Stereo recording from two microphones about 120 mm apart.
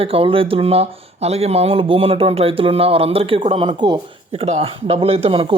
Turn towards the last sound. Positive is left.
turn(degrees=-50)  # may be behind; listen again after turning